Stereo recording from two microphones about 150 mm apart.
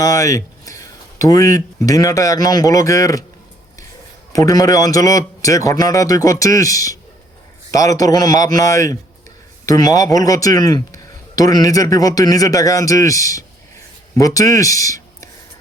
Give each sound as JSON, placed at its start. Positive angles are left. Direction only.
{"t": 0.0, "sound": "speech", "side_deg": 20}
{"t": 4.3, "sound": "speech", "side_deg": 25}